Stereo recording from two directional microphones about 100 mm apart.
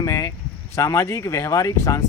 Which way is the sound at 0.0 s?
35° left (ahead or behind).